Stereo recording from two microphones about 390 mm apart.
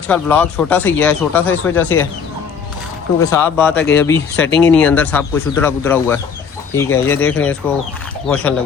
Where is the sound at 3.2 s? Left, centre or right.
Centre.